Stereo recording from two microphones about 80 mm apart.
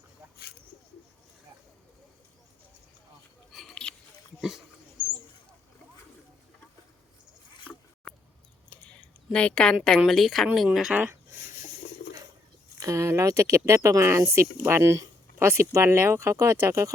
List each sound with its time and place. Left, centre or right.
3.5 s a sound: centre
4.4 s dog: centre
8.1 s a sound: centre
10.1 s speech: centre
10.7 s speech: centre
12.8 s speech: right